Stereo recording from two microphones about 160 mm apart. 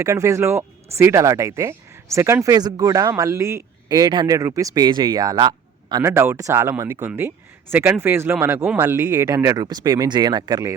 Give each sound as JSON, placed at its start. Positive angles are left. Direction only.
{"t": 0.0, "sound": "speech", "side_deg": -20}